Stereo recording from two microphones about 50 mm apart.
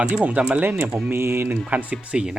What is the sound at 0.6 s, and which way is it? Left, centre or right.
Speech, right.